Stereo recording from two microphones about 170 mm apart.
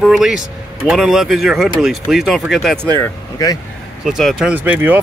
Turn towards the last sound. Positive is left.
turn(degrees=-10)  # may be behind; listen again after turning